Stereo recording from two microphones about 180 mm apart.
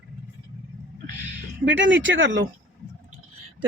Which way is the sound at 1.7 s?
90° right.